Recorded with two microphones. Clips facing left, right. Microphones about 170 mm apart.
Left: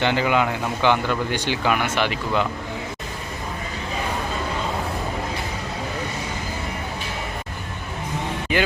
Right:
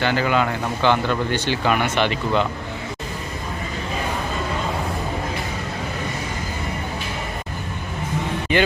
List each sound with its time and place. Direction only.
0.0 s speech: 20° left (ahead or behind)
8.5 s speech: 5° left (ahead or behind)